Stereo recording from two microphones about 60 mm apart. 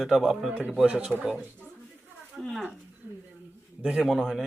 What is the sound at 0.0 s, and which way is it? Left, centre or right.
A man's voice, centre.